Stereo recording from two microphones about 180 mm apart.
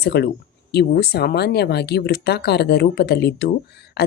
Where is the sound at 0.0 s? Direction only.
70° left (ahead or behind).